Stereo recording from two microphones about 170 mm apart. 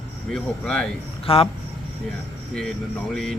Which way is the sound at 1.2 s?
35° left (ahead or behind).